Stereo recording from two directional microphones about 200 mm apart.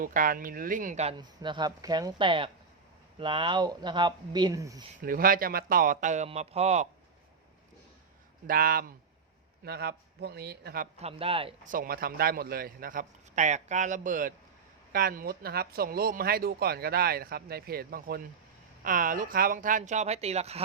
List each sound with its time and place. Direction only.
0.0 s speech: 45° right (ahead or behind)
1.1 s speech: 20° right (ahead or behind)
5.0 s a man's voice: 45° right (ahead or behind)
8.4 s speech: 50° right (ahead or behind)
11.0 s speech: 30° right (ahead or behind)
11.6 s a man's voice: 45° right (ahead or behind)